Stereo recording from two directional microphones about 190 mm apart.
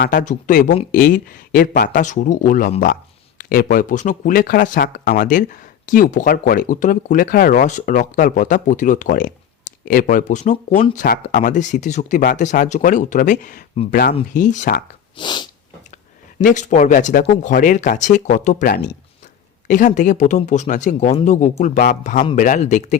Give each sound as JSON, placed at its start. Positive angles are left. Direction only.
{"t": 0.0, "sound": "speech", "side_deg": 45}
{"t": 14.3, "sound": "speech", "side_deg": 45}
{"t": 15.1, "sound": "sneeze", "side_deg": 25}
{"t": 16.4, "sound": "speech", "side_deg": 40}